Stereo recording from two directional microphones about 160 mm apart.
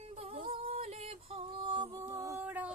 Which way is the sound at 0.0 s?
40° right (ahead or behind).